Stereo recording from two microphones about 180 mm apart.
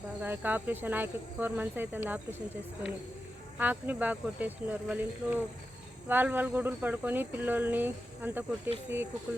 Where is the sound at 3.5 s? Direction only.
10° right (ahead or behind).